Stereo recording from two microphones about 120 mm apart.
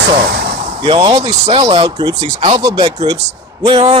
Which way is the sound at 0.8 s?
40° right (ahead or behind).